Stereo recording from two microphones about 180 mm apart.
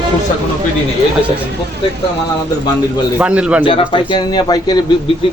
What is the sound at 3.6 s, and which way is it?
Speech, 30° left (ahead or behind).